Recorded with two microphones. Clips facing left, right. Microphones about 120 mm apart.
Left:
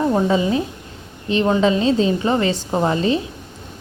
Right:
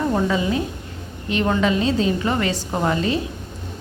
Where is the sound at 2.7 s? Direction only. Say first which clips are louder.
Left 2 dB; 20° left (ahead or behind).